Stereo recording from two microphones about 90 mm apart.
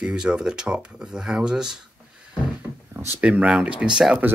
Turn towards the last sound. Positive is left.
turn(degrees=-10)  # may be behind; listen again after turning